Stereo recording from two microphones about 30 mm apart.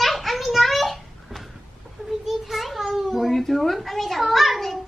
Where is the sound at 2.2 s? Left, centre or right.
Centre.